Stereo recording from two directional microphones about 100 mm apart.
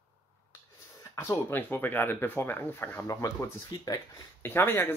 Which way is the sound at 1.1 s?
30° left (ahead or behind).